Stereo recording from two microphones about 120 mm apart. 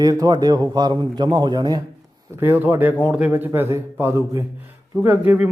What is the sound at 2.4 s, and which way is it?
A man's voice, 20° right (ahead or behind).